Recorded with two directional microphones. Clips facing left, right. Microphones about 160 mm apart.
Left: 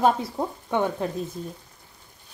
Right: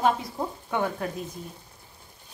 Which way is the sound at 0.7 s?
25° left (ahead or behind).